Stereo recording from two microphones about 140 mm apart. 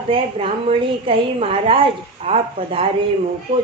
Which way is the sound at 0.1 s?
40° right (ahead or behind).